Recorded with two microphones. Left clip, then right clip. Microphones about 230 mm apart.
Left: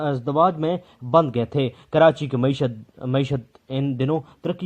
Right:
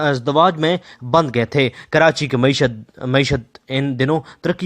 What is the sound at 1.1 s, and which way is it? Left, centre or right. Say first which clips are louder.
Speech: right 3 dB; right.